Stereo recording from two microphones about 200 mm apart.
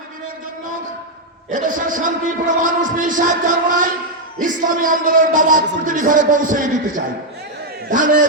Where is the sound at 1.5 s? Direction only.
40° right (ahead or behind).